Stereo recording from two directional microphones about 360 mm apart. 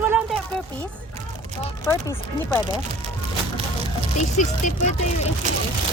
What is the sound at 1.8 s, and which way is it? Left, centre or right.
Speech, centre.